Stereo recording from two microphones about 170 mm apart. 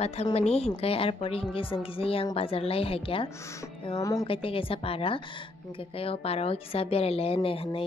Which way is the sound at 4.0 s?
20° left (ahead or behind).